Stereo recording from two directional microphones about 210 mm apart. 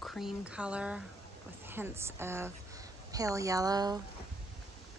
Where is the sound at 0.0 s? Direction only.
Centre (ahead or behind); by 4.0 s 20° right (ahead or behind).